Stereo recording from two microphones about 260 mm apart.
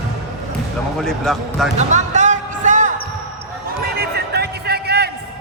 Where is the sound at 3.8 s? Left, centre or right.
Right.